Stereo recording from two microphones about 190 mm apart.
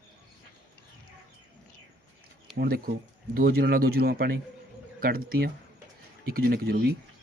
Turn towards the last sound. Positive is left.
turn(degrees=-55)  # may be behind; listen again after turning